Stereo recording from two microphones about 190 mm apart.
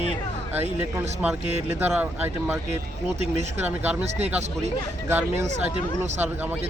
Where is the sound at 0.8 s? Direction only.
10° right (ahead or behind).